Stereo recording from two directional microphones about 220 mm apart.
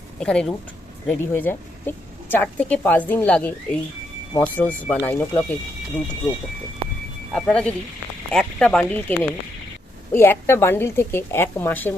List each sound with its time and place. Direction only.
0.2 s speech: 5° left (ahead or behind)
7.3 s speech: 5° left (ahead or behind)